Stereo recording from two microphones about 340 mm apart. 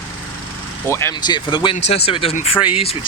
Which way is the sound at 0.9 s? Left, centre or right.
Centre.